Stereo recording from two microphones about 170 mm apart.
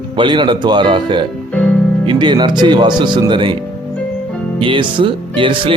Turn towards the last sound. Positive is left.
turn(degrees=-30)  # may be behind; listen again after turning